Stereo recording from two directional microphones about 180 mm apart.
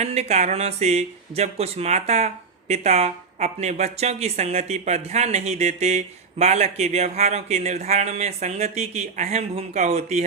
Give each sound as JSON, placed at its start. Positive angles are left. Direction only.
{"t": 0.0, "sound": "speech", "side_deg": -35}